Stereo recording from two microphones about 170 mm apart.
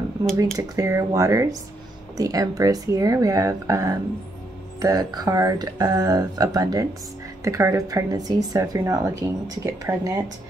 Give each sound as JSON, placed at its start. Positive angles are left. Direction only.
{"t": 0.2, "sound": "speech", "side_deg": -25}